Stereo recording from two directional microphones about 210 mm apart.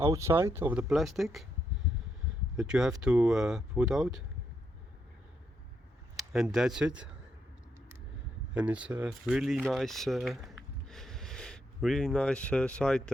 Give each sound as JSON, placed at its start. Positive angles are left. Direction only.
{"t": 0.0, "sound": "speech", "side_deg": -10}
{"t": 2.6, "sound": "speech", "side_deg": -5}
{"t": 6.1, "sound": "speech", "side_deg": 0}
{"t": 8.5, "sound": "speech", "side_deg": -5}